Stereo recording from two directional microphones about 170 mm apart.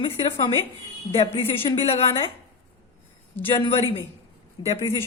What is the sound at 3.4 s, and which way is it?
A woman's voice, 30° left (ahead or behind).